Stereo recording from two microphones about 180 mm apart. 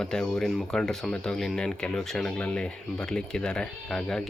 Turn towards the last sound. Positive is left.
turn(degrees=5)  # may be behind; listen again after turning